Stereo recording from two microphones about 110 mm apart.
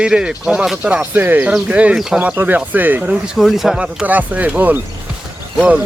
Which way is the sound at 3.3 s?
Centre (ahead or behind).